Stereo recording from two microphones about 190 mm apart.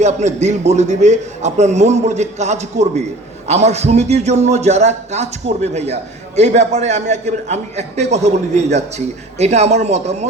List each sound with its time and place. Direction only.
0.0 s a man's voice: 35° right (ahead or behind)